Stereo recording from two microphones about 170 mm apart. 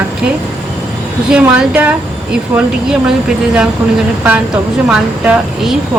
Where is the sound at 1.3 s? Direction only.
10° right (ahead or behind).